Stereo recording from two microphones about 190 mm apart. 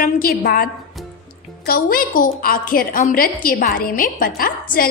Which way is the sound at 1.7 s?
50° left (ahead or behind).